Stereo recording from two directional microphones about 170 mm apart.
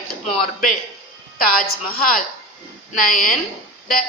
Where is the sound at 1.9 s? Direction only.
55° left (ahead or behind).